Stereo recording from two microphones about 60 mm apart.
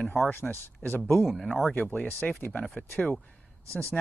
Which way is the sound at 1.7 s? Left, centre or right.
Left.